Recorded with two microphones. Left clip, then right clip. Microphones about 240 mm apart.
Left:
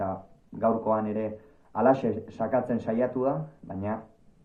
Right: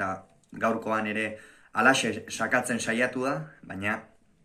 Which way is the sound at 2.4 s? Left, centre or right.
Right.